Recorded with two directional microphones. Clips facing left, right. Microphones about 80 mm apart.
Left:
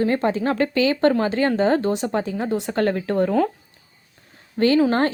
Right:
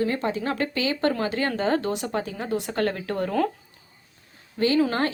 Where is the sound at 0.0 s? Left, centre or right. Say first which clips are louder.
Left 5 dB; left.